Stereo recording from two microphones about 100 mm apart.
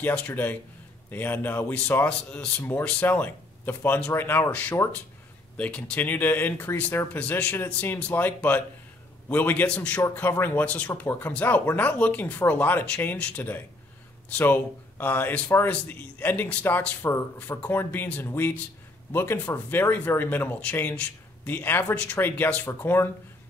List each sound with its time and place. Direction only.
0.0 s a man's voice: 10° left (ahead or behind)